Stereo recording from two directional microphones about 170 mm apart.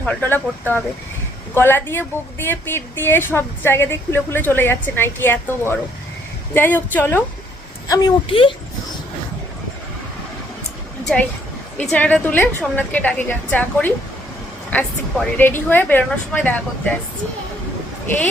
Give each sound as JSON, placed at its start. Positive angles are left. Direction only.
{"t": 0.0, "sound": "a woman's voice", "side_deg": 10}
{"t": 7.9, "sound": "a woman's voice", "side_deg": 25}
{"t": 11.8, "sound": "a woman's voice", "side_deg": 10}